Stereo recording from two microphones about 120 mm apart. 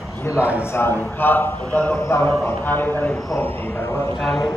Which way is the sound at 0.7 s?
20° left (ahead or behind).